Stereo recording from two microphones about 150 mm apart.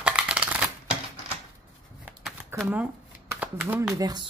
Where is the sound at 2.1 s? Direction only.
10° right (ahead or behind).